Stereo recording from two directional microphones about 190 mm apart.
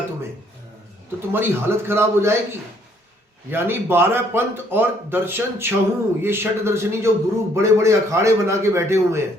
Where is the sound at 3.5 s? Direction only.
10° right (ahead or behind).